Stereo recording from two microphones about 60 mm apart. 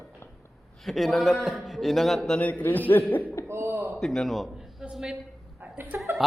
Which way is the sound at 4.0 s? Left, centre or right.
Centre.